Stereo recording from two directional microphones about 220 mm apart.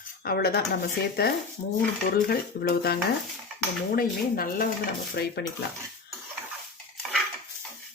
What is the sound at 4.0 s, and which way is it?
Dishes, 40° left (ahead or behind).